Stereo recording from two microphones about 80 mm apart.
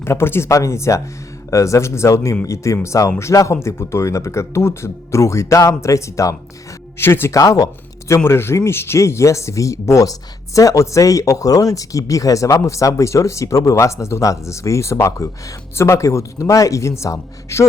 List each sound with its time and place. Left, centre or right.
0.0 s speech: left
7.3 s speech: left